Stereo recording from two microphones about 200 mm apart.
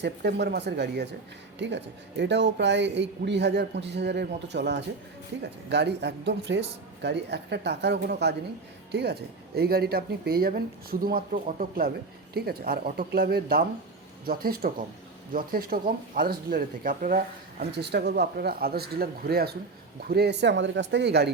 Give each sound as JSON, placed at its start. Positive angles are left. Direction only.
{"t": 0.0, "sound": "speech", "side_deg": -55}